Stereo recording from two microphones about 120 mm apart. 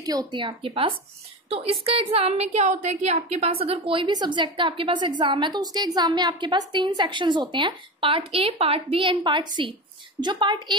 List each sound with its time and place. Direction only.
0.0 s a woman's voice: 30° right (ahead or behind)